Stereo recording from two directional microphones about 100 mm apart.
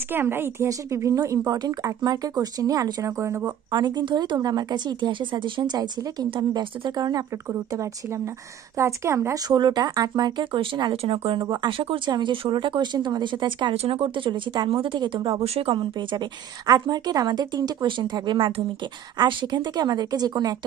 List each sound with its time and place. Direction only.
0.1 s a woman's voice: 20° right (ahead or behind)
3.7 s speech: 45° right (ahead or behind)
6.5 s speech: 55° right (ahead or behind)
7.0 s a woman's voice: 40° right (ahead or behind)
9.5 s speech: 45° right (ahead or behind); by 11.4 s 65° right (ahead or behind)
11.5 s speech: 55° right (ahead or behind)
13.7 s speech: 75° right (ahead or behind); by 15.3 s 55° right (ahead or behind)
15.4 s speech: 90° right
15.7 s speech: 55° right (ahead or behind)
16.6 s speech: 40° right (ahead or behind)